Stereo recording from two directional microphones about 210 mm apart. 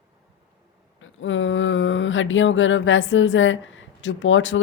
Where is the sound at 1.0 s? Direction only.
65° left (ahead or behind).